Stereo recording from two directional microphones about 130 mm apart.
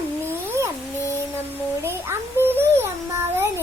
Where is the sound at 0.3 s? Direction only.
20° right (ahead or behind).